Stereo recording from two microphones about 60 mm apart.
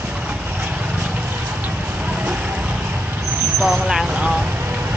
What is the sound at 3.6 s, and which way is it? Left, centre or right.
Vehicle, centre.